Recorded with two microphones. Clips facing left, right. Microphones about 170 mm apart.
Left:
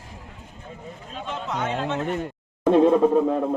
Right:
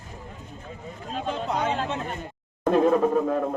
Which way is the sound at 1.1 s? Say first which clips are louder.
Right 4 dB; 35° right (ahead or behind).